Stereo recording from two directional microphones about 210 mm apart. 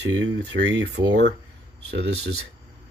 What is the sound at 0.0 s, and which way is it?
Speech, 60° right (ahead or behind).